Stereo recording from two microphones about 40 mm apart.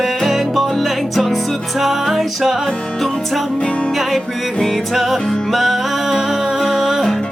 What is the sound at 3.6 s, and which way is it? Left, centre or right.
Music, left.